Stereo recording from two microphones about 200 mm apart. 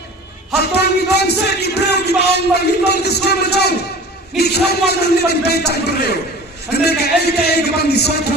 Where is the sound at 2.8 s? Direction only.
55° left (ahead or behind).